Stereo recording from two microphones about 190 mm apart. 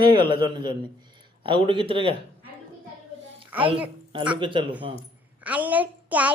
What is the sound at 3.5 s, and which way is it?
Speech, 10° right (ahead or behind).